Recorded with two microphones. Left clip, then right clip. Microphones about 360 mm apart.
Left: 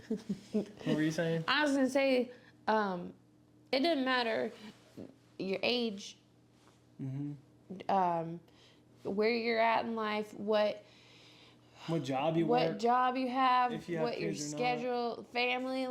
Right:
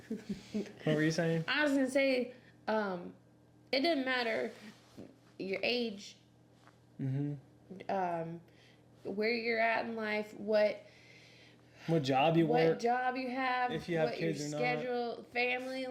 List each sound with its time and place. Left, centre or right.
0.9 s speech: centre
1.5 s speech: left
7.0 s speech: centre
7.8 s a woman's voice: left
11.9 s speech: centre
12.5 s speech: left
13.7 s speech: centre
14.6 s speech: left